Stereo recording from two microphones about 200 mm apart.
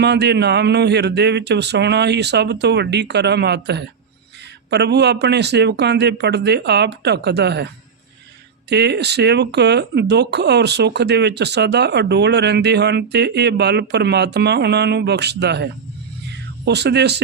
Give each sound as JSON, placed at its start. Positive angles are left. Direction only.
{"t": 0.0, "sound": "speech", "side_deg": -55}
{"t": 8.7, "sound": "speech", "side_deg": -55}